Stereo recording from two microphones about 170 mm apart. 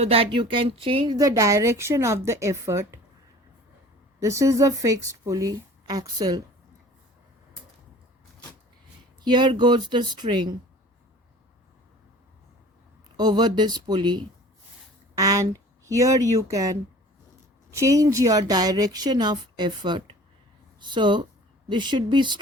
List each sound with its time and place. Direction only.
0.0 s a woman's voice: 35° right (ahead or behind); by 3.0 s 15° right (ahead or behind)
4.2 s a woman's voice: 15° right (ahead or behind)
9.2 s a woman's voice: 25° right (ahead or behind)
13.1 s a woman's voice: 25° right (ahead or behind)